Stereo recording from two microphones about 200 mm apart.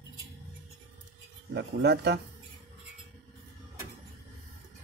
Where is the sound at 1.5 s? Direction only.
60° right (ahead or behind).